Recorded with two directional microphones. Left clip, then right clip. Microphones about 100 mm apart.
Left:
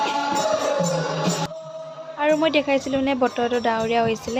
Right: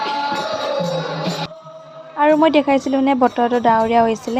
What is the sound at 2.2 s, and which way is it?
A woman's voice, 35° right (ahead or behind).